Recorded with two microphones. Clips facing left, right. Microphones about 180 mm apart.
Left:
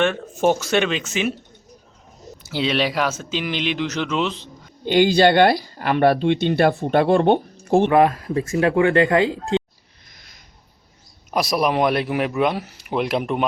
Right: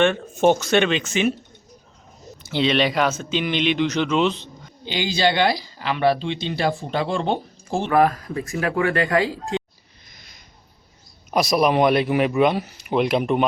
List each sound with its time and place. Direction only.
0.0 s speech: 5° left (ahead or behind)
2.4 s speech: 5° left (ahead or behind)
4.9 s speech: 55° left (ahead or behind)
7.9 s speech: 25° left (ahead or behind)
11.3 s speech: 5° left (ahead or behind)